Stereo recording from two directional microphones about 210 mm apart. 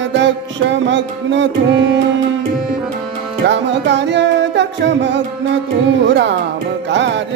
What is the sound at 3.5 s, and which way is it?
Music, 55° right (ahead or behind).